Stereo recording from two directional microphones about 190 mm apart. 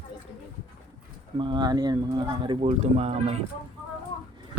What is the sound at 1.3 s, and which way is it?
Speech, 25° right (ahead or behind).